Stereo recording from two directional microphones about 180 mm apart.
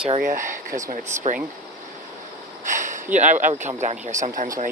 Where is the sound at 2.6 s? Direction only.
45° right (ahead or behind).